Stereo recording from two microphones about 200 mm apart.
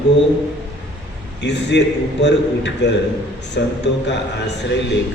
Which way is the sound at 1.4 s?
60° left (ahead or behind).